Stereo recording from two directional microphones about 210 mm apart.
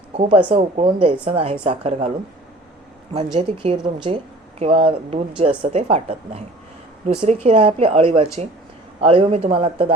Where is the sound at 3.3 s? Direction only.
25° right (ahead or behind).